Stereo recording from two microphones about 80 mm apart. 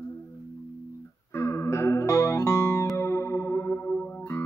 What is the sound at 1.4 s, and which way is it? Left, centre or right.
Music, left.